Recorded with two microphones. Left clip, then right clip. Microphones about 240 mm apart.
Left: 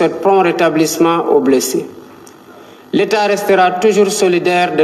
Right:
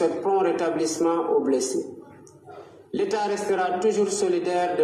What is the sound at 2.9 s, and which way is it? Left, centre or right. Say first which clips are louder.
A man's voice: left 12 dB; left.